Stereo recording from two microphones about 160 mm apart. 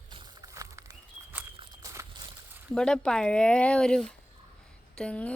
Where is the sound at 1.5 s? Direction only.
30° right (ahead or behind).